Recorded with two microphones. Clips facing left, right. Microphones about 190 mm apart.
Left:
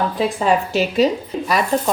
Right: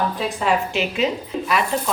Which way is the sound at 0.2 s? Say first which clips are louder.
Left 4 dB; 35° left (ahead or behind).